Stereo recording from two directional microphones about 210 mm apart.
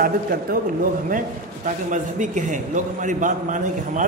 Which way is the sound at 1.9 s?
35° right (ahead or behind).